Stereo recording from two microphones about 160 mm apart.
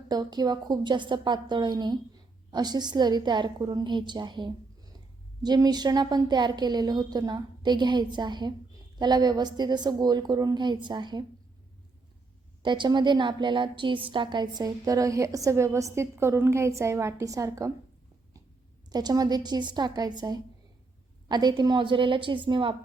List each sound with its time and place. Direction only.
0.1 s a woman's voice: 25° right (ahead or behind)
12.6 s a woman's voice: 30° right (ahead or behind)
18.9 s a woman's voice: 25° right (ahead or behind)